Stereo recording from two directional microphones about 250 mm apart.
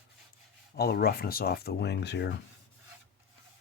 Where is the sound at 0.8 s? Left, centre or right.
Left.